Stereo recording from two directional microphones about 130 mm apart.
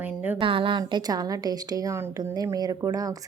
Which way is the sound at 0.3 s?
40° right (ahead or behind).